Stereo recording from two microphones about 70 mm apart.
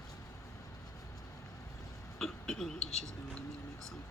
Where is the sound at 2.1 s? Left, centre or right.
Centre.